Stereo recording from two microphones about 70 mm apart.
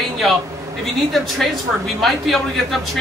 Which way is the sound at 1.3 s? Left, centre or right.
Centre.